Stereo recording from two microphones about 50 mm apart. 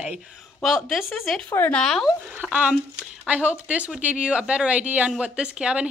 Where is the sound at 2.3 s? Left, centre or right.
Right.